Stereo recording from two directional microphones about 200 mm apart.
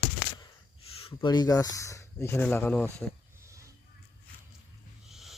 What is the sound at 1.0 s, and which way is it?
Speech, 25° left (ahead or behind).